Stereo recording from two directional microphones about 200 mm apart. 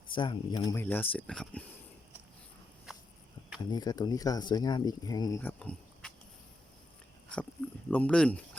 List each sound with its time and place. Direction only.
0.1 s speech: 25° left (ahead or behind)
0.8 s speech: 10° left (ahead or behind)
3.7 s speech: 20° left (ahead or behind)
5.4 s a sound: 5° left (ahead or behind)
7.9 s speech: 5° left (ahead or behind)